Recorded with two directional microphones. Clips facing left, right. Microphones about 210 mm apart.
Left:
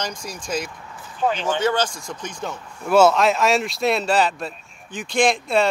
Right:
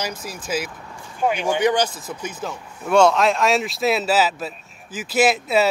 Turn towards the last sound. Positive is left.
turn(degrees=-5)  # may be behind; listen again after turning